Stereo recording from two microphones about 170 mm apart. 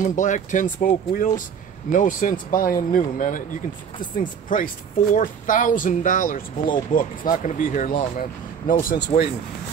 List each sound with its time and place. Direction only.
0.0 s speech: 45° left (ahead or behind); by 9.1 s 65° left (ahead or behind)